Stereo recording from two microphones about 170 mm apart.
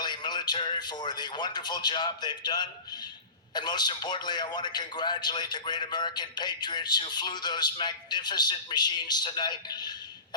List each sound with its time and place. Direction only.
0.0 s a man's voice: 25° left (ahead or behind)